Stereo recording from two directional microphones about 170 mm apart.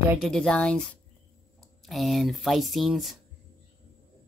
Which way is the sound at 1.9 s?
Centre (ahead or behind).